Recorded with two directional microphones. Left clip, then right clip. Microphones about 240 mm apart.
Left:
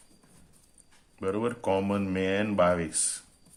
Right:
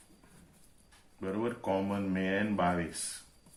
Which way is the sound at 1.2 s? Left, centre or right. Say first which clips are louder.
Left 6 dB; left.